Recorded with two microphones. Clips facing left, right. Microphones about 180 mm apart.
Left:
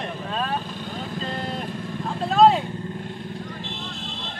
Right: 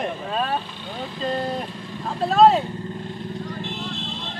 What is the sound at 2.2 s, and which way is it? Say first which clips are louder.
Speech: right 1 dB; centre (ahead or behind).